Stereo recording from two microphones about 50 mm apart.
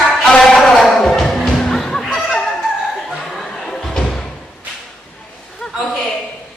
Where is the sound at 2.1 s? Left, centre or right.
Centre.